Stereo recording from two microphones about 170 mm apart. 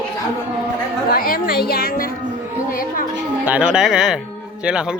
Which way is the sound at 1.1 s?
60° left (ahead or behind).